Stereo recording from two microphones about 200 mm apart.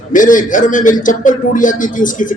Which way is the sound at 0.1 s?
40° left (ahead or behind).